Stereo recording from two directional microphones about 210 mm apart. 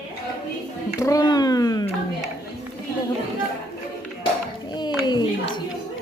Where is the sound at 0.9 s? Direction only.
15° left (ahead or behind).